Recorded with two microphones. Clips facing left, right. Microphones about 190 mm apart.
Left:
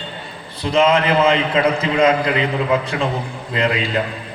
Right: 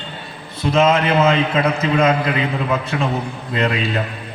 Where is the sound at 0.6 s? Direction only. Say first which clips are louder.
Even; 30° left (ahead or behind).